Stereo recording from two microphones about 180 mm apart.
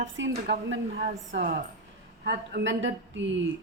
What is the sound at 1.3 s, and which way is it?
Speech, 90° right.